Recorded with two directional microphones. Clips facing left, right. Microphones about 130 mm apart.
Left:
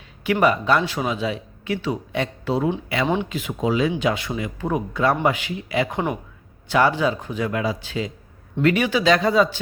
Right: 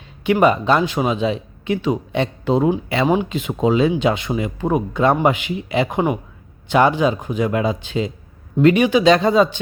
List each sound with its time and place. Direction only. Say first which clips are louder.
0.3 s speech: right 4 dB; 25° right (ahead or behind)